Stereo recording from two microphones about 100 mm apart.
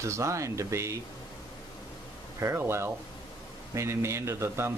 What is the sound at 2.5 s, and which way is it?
Speech, 25° right (ahead or behind).